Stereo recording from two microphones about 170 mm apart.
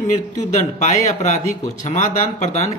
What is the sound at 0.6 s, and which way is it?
A woman's voice, 45° left (ahead or behind).